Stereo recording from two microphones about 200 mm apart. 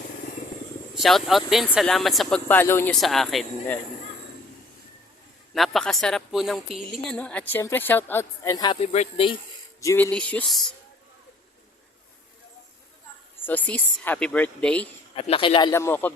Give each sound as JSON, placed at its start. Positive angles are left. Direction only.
{"t": 0.9, "sound": "speech", "side_deg": 0}
{"t": 5.5, "sound": "a woman's voice", "side_deg": 0}
{"t": 9.8, "sound": "speech", "side_deg": 10}
{"t": 13.4, "sound": "a woman's voice", "side_deg": 10}
{"t": 15.1, "sound": "a man's voice", "side_deg": 30}
{"t": 15.7, "sound": "a woman's voice", "side_deg": 10}